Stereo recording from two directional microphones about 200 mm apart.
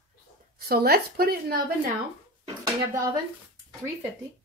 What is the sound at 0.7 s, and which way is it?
Speech, 50° right (ahead or behind).